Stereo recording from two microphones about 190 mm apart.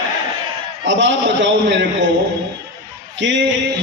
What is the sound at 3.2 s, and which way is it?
Speech, 75° right (ahead or behind).